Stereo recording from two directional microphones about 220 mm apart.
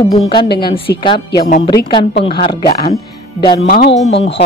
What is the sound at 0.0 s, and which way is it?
A woman's voice, 25° left (ahead or behind).